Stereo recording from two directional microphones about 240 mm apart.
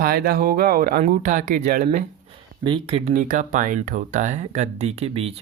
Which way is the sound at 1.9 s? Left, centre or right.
Right.